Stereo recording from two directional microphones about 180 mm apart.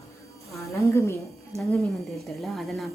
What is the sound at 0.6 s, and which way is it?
Speech, 15° left (ahead or behind).